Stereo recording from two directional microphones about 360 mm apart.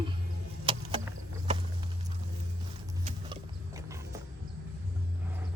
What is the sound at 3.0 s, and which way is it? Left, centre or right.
Wild animals, centre.